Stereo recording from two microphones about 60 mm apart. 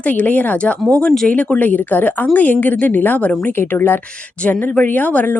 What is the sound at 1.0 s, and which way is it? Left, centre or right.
Speech, centre.